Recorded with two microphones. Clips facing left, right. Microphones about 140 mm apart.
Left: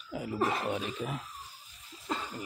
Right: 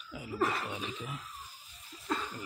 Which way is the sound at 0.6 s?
45° left (ahead or behind).